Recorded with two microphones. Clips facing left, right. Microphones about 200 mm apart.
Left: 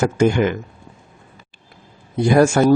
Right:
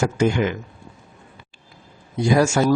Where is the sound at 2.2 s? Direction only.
55° left (ahead or behind).